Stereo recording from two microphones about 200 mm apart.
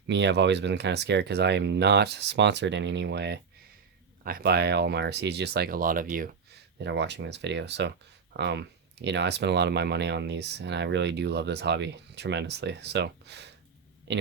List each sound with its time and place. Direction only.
0.1 s speech: 60° right (ahead or behind); by 6.3 s 45° right (ahead or behind)
6.7 s speech: 60° right (ahead or behind)